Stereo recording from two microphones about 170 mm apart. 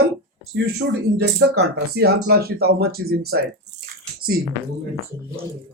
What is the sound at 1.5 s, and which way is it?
Speech, 70° right (ahead or behind).